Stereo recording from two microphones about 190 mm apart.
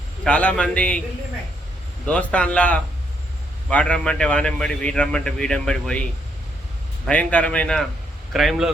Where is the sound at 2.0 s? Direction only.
5° left (ahead or behind).